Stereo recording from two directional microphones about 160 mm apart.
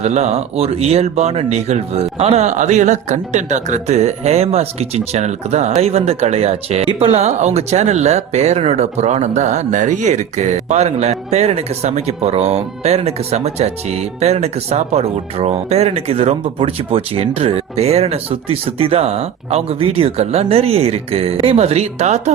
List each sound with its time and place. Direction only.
0.0 s speech: 45° right (ahead or behind)